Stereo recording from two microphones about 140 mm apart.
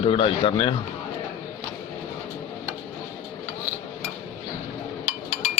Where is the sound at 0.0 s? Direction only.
40° left (ahead or behind).